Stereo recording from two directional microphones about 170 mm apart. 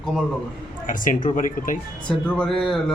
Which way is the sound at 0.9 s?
50° left (ahead or behind).